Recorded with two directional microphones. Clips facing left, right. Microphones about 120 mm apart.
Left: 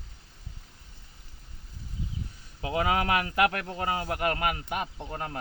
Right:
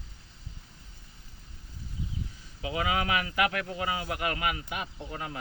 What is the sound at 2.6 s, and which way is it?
A man's voice, 45° left (ahead or behind).